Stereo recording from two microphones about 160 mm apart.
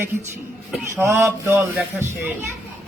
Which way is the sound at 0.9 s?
15° right (ahead or behind).